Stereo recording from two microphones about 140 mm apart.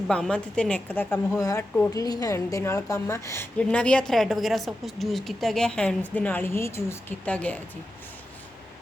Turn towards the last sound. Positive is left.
turn(degrees=10)  # may be behind; listen again after turning